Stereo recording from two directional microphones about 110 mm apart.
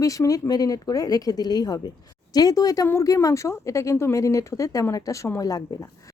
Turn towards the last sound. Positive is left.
turn(degrees=35)  # may be behind; listen again after turning